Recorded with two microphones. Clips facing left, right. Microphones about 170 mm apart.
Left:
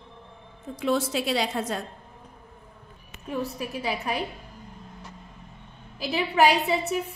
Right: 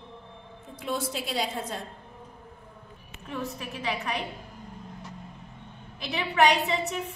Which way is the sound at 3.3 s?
35° left (ahead or behind).